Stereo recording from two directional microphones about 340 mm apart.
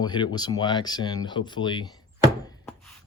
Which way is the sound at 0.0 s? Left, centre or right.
Centre.